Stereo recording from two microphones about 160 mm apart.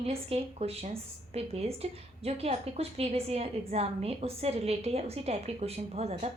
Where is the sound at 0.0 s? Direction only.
40° right (ahead or behind).